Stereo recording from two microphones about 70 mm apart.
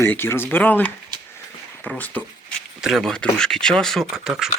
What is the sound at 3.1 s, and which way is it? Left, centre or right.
Speech, centre.